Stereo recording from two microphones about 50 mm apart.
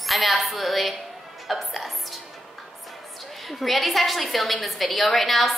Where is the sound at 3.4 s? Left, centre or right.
Centre.